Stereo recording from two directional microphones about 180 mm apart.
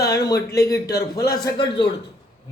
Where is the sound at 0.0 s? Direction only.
20° left (ahead or behind).